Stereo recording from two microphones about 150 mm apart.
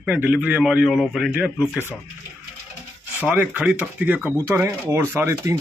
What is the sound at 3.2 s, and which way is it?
A man's voice, 10° right (ahead or behind).